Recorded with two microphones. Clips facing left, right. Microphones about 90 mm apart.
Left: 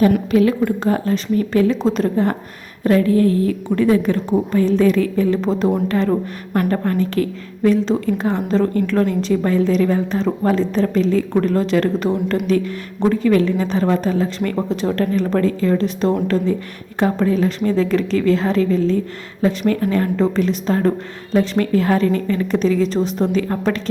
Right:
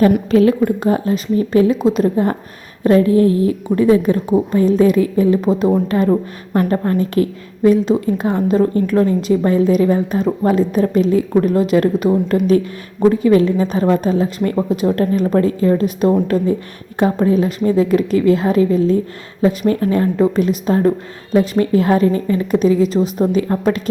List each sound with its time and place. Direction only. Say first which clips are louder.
0.3 s a woman's voice: right 3 dB; 30° right (ahead or behind); by 2.3 s 10° right (ahead or behind)
2.8 s a woman's voice: right 3 dB; 20° right (ahead or behind)
14.5 s a woman's voice: right 3 dB; 10° right (ahead or behind)
19.4 s a woman's voice: right 2 dB; 25° right (ahead or behind)